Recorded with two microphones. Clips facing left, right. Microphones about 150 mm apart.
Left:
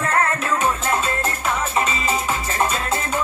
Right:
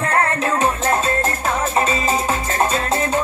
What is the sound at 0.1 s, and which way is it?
Music, 35° right (ahead or behind).